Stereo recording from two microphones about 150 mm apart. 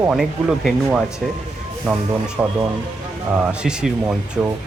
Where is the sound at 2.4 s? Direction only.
10° right (ahead or behind).